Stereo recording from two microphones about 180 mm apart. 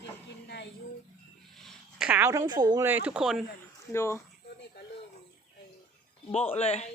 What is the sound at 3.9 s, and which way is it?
Speech, 15° left (ahead or behind).